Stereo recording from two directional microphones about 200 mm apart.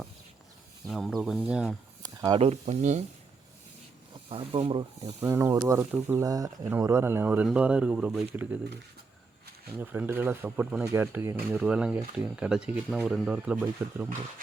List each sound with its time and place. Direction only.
0.9 s speech: centre (ahead or behind)
2.0 s a sound: 20° right (ahead or behind)
2.4 s speech: 35° right (ahead or behind)
4.3 s speech: 30° right (ahead or behind)
5.2 s speech: 15° right (ahead or behind)
9.7 s speech: 10° right (ahead or behind)